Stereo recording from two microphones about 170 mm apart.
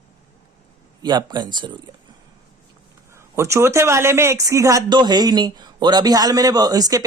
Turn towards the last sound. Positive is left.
turn(degrees=-20)  # may be behind; listen again after turning